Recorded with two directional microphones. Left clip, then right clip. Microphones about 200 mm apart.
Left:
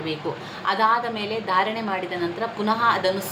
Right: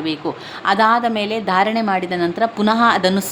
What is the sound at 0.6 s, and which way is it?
A woman's voice, 55° right (ahead or behind).